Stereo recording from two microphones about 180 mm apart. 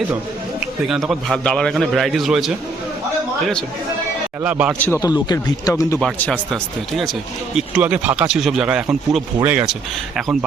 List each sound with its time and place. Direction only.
0.9 s speech: centre (ahead or behind)
4.4 s a man's voice: 10° right (ahead or behind)
5.0 s speech: 25° left (ahead or behind)
6.0 s speech: 5° left (ahead or behind)